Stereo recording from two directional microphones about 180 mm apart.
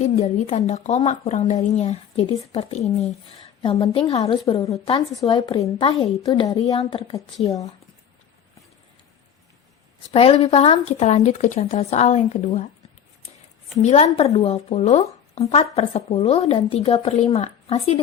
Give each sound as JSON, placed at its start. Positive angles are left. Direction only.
{"t": 0.0, "sound": "a woman's voice", "side_deg": 40}
{"t": 10.1, "sound": "speech", "side_deg": 30}
{"t": 13.8, "sound": "speech", "side_deg": 35}